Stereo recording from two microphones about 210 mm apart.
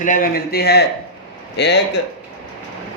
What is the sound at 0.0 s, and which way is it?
A man's voice, 40° left (ahead or behind).